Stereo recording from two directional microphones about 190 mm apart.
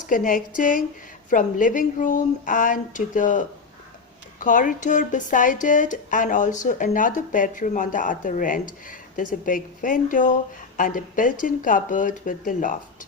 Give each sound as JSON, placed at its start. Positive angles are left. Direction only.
{"t": 0.1, "sound": "speech", "side_deg": 45}